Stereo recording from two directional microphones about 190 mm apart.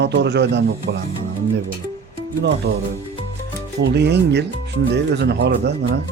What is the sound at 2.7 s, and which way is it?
Speech, 65° right (ahead or behind).